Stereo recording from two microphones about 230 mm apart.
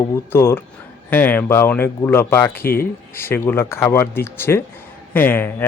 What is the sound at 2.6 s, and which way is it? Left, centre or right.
Speech, left.